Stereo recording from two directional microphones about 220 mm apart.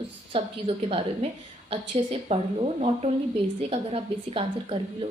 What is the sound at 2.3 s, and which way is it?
Speech, 25° right (ahead or behind).